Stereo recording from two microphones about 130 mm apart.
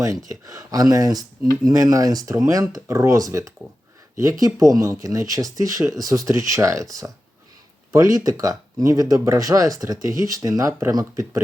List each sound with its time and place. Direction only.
0.3 s speech: 25° right (ahead or behind)
7.9 s speech: 25° right (ahead or behind)